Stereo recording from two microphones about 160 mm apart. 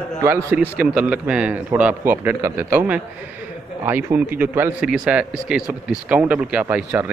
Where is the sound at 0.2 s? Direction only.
15° right (ahead or behind).